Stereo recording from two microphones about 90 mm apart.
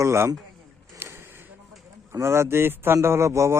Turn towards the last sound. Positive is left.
turn(degrees=-35)  # may be behind; listen again after turning